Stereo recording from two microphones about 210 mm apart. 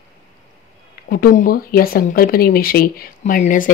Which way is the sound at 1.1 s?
45° left (ahead or behind).